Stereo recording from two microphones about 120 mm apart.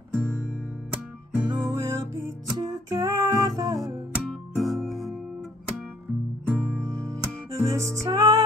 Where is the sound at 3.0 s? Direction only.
35° right (ahead or behind).